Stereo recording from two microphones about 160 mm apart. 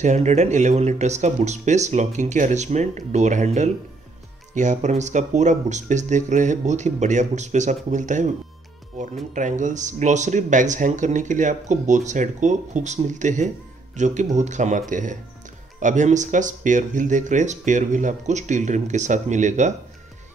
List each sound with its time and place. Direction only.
0.0 s speech: 45° right (ahead or behind)